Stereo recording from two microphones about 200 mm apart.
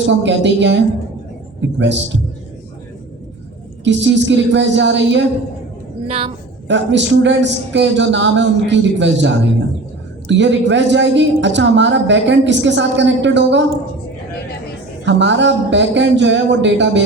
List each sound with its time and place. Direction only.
0.1 s a woman's voice: 65° right (ahead or behind)
1.8 s a woman's voice: 60° right (ahead or behind)
3.8 s a woman's voice: 65° right (ahead or behind)
6.1 s a woman's voice: 30° right (ahead or behind)
6.7 s a woman's voice: 65° right (ahead or behind)
15.0 s a woman's voice: 65° right (ahead or behind)